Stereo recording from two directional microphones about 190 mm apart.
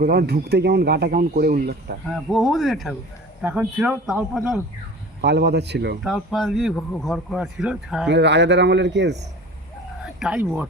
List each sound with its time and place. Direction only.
0.0 s speech: 55° right (ahead or behind)
2.0 s speech: centre (ahead or behind)
5.2 s speech: 60° right (ahead or behind)
6.0 s speech: centre (ahead or behind)
8.1 s speech: 65° right (ahead or behind)
10.2 s speech: 5° right (ahead or behind)